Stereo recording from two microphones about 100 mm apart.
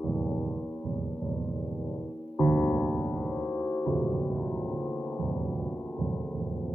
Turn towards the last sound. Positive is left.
turn(degrees=15)  # may be behind; listen again after turning